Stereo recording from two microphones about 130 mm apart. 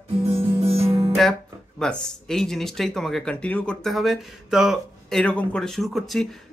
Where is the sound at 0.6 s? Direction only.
50° right (ahead or behind).